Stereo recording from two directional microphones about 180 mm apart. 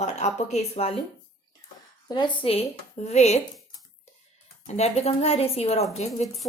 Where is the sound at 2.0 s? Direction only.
25° left (ahead or behind).